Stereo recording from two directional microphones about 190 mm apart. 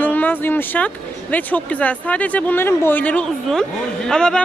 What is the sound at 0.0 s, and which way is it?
Speech, 10° left (ahead or behind).